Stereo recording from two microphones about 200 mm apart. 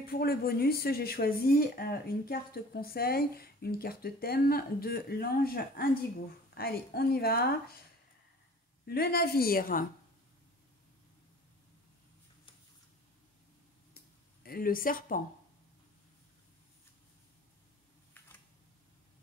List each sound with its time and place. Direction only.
0.0 s speech: 50° left (ahead or behind)
8.8 s speech: 50° left (ahead or behind)
13.9 s a sound: 50° left (ahead or behind)